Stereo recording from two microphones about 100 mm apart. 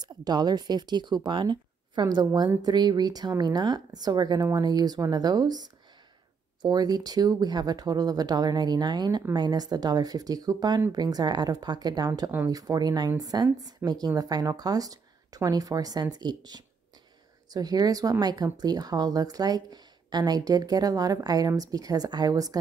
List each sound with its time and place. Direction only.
0.0 s speech: 45° right (ahead or behind)